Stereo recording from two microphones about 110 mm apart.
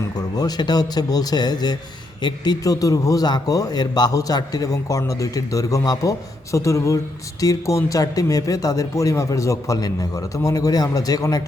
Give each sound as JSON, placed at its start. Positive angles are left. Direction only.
{"t": 0.2, "sound": "a man's voice", "side_deg": 35}